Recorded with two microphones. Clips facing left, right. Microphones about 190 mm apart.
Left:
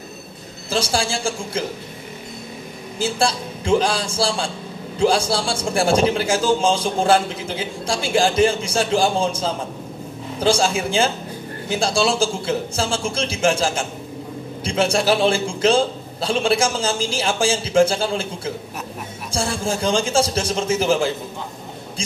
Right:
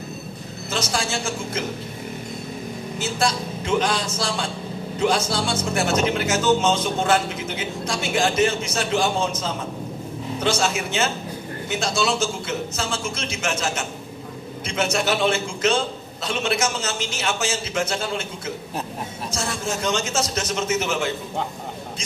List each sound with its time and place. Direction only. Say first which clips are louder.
0.7 s a man's voice: left 4 dB; 30° left (ahead or behind)
3.0 s a man's voice: left 3 dB; 30° left (ahead or behind)